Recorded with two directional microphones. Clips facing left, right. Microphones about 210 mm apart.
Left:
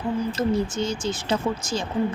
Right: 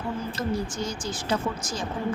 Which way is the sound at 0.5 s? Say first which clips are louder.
Left 5 dB; 25° left (ahead or behind).